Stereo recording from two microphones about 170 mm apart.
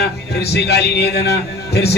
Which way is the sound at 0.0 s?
70° left (ahead or behind).